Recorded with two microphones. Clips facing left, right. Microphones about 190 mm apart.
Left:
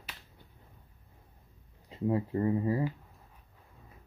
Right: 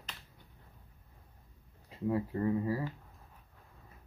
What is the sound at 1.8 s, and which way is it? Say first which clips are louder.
Speech: left 3 dB; 25° left (ahead or behind).